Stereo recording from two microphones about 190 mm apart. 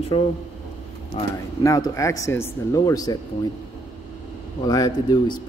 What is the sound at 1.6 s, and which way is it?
Speech, 15° left (ahead or behind).